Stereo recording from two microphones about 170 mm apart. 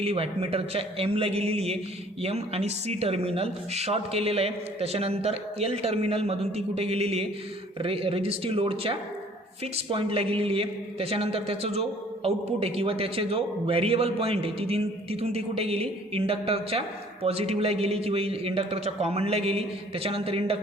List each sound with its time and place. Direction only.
0.0 s a man's voice: 35° right (ahead or behind)